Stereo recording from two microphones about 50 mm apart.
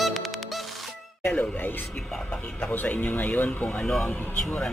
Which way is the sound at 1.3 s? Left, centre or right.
Left.